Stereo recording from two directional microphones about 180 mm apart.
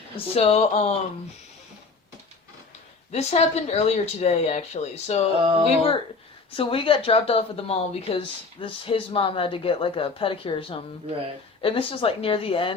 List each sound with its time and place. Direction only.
0.3 s a woman's voice: 35° left (ahead or behind)
3.1 s a woman's voice: 35° left (ahead or behind)
5.4 s speech: 30° right (ahead or behind)
6.6 s a woman's voice: 30° left (ahead or behind)